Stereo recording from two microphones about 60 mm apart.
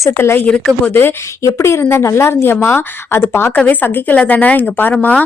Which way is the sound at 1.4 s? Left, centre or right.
Left.